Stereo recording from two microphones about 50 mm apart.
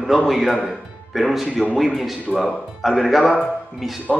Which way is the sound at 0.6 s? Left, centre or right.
Centre.